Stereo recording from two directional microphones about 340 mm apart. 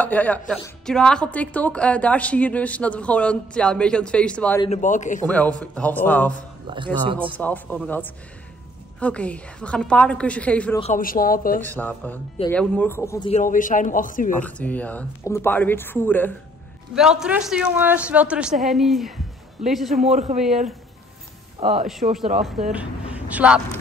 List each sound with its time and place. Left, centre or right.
0.0 s a woman's voice: centre
4.6 s a man's voice: left
5.2 s a woman's voice: centre
6.7 s speech: centre
7.3 s a woman's voice: centre
10.8 s a man's voice: left
11.6 s a woman's voice: centre; by 14.3 s left
14.4 s a woman's voice: centre
20.1 s speech: right
21.5 s speech: centre
22.7 s speech: centre